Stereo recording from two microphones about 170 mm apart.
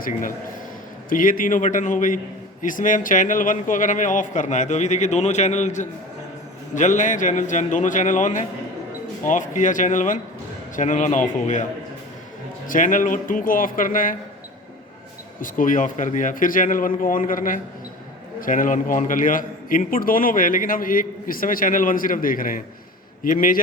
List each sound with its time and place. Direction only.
0.0 s a man's voice: 55° left (ahead or behind)
12.6 s a man's voice: 50° left (ahead or behind)
15.4 s a man's voice: 50° left (ahead or behind)